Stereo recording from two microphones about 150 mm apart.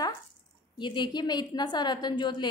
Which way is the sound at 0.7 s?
30° left (ahead or behind).